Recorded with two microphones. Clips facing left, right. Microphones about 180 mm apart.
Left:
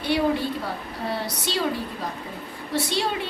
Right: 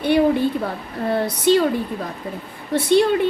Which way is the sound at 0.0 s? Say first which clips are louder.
Right 6 dB; 55° right (ahead or behind).